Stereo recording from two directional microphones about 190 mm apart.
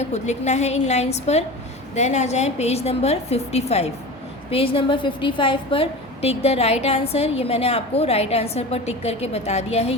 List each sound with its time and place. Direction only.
0.0 s a woman's voice: 35° left (ahead or behind)